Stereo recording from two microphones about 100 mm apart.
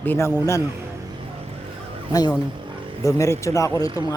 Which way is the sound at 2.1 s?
45° left (ahead or behind).